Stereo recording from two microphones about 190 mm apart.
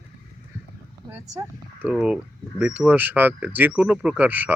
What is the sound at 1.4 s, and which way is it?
Speech, 20° right (ahead or behind).